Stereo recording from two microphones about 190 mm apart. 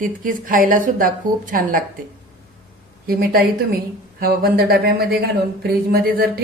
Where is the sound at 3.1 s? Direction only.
50° right (ahead or behind).